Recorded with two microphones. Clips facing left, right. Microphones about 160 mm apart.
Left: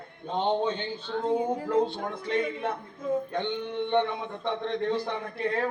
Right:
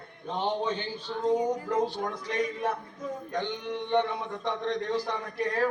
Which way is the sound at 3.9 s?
25° left (ahead or behind).